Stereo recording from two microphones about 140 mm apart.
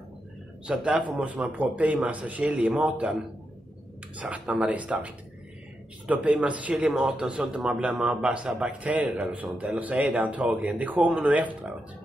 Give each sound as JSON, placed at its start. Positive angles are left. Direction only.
{"t": 0.7, "sound": "speech", "side_deg": -10}
{"t": 4.2, "sound": "speech", "side_deg": -10}